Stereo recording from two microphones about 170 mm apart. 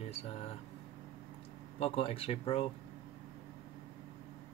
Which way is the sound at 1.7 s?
35° left (ahead or behind).